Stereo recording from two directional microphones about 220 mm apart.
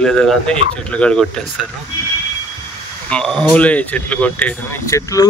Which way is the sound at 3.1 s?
5° left (ahead or behind).